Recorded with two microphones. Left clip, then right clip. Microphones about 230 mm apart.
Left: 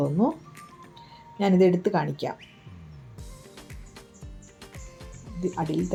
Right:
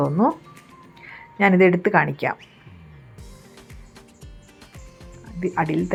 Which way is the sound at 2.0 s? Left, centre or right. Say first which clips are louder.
Right 8 dB; right.